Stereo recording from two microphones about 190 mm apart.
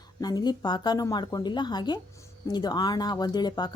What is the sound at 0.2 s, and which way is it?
Speech, 20° left (ahead or behind).